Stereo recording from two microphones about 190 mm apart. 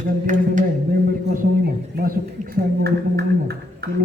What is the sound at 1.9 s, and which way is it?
Speech, 50° right (ahead or behind).